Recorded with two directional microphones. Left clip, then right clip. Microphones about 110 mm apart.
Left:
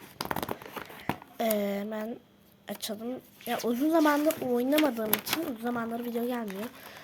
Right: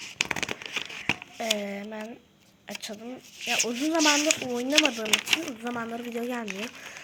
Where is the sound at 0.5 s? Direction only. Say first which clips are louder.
Right 7 dB; 15° left (ahead or behind).